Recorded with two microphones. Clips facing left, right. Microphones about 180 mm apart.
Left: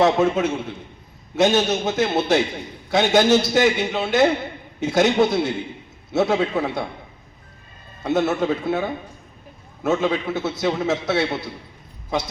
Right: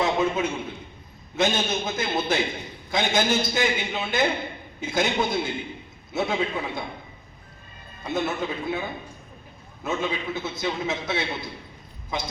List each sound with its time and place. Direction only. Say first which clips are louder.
0.0 s a man's voice: left 6 dB; 75° left (ahead or behind)
8.0 s a man's voice: left 7 dB; 75° left (ahead or behind)